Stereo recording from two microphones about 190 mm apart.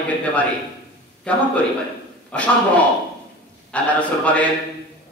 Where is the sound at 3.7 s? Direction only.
5° left (ahead or behind).